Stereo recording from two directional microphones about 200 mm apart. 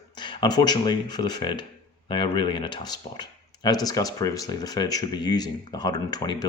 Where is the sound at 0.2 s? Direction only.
20° left (ahead or behind).